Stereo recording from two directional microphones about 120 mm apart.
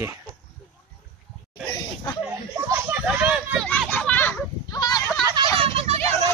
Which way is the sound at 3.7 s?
10° left (ahead or behind).